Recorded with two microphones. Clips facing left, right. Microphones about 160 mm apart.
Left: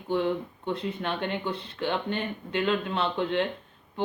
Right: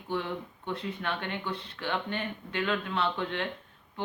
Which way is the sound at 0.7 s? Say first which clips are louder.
Left 4 dB; 25° left (ahead or behind).